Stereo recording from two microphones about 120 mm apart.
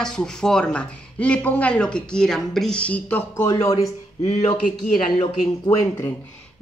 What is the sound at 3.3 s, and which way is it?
Speech, 25° left (ahead or behind).